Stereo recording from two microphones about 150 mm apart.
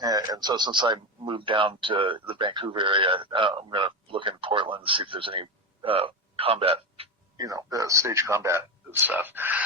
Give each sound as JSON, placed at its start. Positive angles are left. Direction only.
{"t": 0.0, "sound": "speech", "side_deg": -25}
{"t": 7.3, "sound": "speech", "side_deg": -25}